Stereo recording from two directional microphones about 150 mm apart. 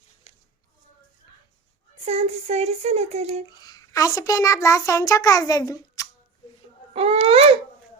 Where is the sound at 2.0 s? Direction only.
45° right (ahead or behind).